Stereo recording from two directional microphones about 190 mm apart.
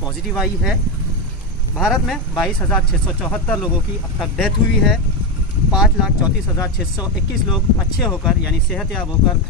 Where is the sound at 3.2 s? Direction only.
5° left (ahead or behind).